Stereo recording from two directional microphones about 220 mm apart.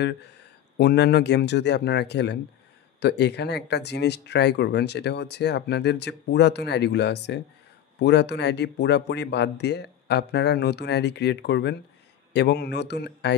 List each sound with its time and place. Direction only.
0.7 s speech: 50° left (ahead or behind)